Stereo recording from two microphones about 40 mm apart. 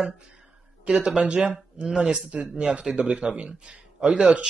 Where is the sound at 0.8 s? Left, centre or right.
Right.